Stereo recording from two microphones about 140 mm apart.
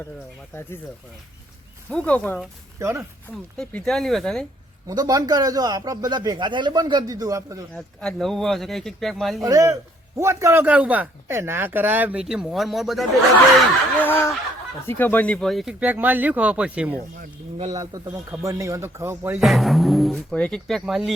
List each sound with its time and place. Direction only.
1.9 s speech: 10° left (ahead or behind)
2.7 s a man's voice: 20° right (ahead or behind)
3.6 s speech: 5° left (ahead or behind)
4.9 s a man's voice: 25° right (ahead or behind)
8.0 s speech: centre (ahead or behind)
9.4 s a man's voice: 25° right (ahead or behind); by 13.1 s centre (ahead or behind)
14.0 s speech: 15° left (ahead or behind)
15.8 s speech: 10° right (ahead or behind)
17.7 s a man's voice: 25° right (ahead or behind)
19.4 s speech: centre (ahead or behind)